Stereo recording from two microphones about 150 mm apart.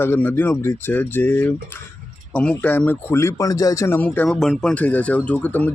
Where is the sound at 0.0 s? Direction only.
15° left (ahead or behind).